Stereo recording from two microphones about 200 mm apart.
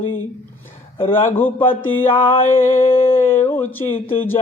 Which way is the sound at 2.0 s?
10° left (ahead or behind).